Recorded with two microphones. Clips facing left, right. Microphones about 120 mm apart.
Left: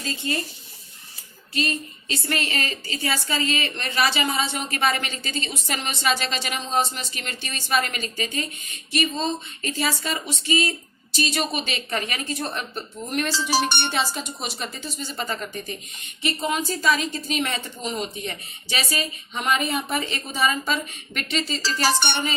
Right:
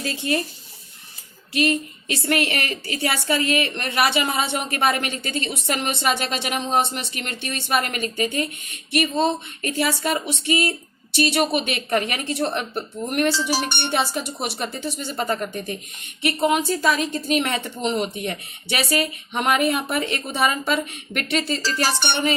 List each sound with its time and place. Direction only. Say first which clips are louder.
0.0 s speech: right 4 dB; 65° right (ahead or behind)
2.0 s a woman's voice: right 5 dB; 70° right (ahead or behind); by 22.3 s 55° right (ahead or behind)